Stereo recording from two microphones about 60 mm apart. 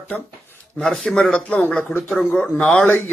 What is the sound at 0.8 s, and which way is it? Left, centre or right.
Speech, centre.